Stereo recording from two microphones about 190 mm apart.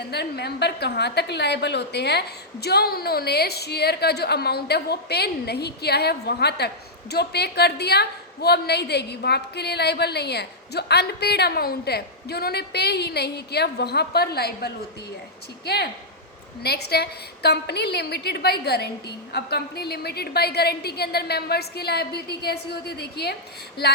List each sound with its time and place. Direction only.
0.1 s a woman's voice: 60° left (ahead or behind)